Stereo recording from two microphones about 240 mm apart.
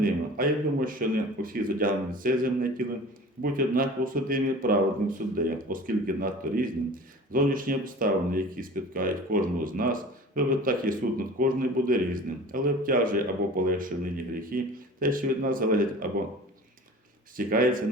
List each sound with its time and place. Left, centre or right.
0.0 s a man's voice: right
17.3 s a man's voice: right